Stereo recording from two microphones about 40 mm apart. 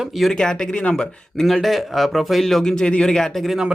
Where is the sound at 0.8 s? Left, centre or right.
Left.